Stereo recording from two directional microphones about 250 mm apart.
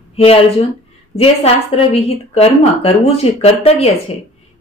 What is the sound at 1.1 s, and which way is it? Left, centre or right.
Speech, left.